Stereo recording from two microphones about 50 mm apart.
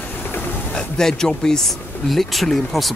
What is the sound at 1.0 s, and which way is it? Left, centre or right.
Speech, centre.